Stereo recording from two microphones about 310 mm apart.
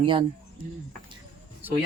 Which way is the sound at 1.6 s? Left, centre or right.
Centre.